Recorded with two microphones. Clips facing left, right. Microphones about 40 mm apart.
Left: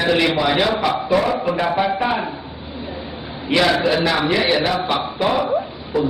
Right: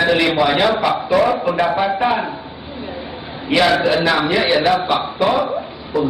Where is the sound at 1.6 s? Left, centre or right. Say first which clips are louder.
Right 1 dB; centre.